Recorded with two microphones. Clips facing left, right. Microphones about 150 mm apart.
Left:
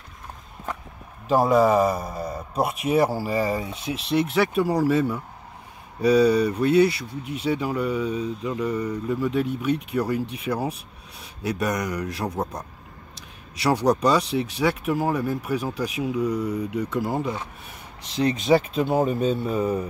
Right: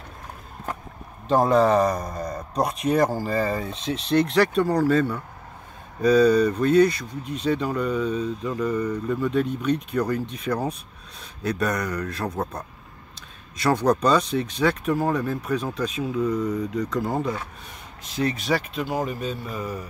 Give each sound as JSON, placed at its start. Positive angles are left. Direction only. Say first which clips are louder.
{"t": 1.2, "sound": "speech", "louder": "even", "side_deg": 10}
{"t": 13.6, "sound": "speech", "louder": "even", "side_deg": 10}
{"t": 18.2, "sound": "speech", "louder": "left 5 dB", "side_deg": 20}